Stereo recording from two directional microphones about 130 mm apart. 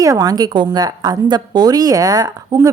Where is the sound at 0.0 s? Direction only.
25° right (ahead or behind).